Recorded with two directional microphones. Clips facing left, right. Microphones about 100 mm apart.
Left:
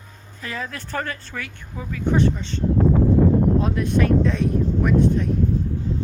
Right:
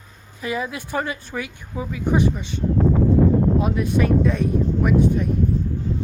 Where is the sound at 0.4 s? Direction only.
10° right (ahead or behind).